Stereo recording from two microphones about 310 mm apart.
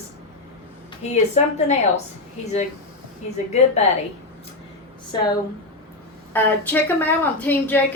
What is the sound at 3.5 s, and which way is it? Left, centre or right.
Speech, left.